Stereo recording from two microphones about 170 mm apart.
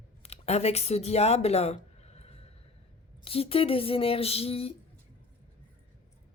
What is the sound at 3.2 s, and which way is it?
Speech, 35° left (ahead or behind).